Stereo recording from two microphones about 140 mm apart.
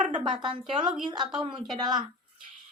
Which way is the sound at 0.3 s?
35° right (ahead or behind).